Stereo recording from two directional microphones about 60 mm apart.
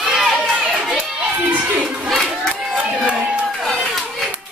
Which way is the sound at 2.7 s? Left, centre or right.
Right.